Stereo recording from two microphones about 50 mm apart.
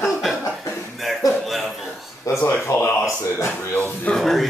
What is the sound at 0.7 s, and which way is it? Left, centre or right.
Cough, left.